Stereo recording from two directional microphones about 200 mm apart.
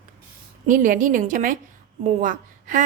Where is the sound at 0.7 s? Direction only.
40° right (ahead or behind).